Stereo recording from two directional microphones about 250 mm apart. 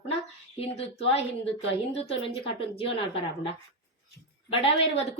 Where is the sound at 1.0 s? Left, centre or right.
Left.